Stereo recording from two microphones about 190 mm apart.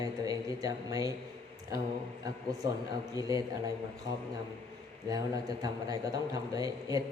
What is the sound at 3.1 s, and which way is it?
Speech, 20° right (ahead or behind).